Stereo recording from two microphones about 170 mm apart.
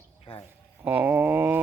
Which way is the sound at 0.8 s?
10° right (ahead or behind).